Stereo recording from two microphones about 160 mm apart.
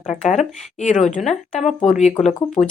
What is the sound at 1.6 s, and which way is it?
Speech, centre (ahead or behind).